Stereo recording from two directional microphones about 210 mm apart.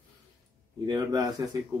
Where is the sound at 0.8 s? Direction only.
20° right (ahead or behind).